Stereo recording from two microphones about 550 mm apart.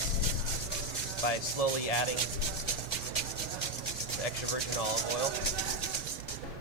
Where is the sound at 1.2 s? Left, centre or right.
Left.